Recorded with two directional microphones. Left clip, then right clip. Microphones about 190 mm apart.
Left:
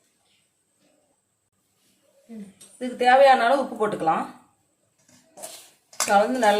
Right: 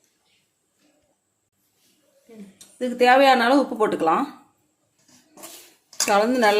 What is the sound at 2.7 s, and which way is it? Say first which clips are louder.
Speech: right 1 dB; 45° right (ahead or behind).